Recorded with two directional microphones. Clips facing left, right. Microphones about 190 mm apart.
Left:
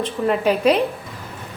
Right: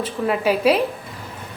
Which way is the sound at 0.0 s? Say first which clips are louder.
Left 2 dB; 5° right (ahead or behind).